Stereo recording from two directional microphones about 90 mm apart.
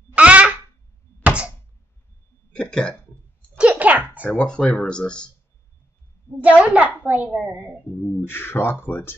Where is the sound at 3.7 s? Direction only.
15° right (ahead or behind).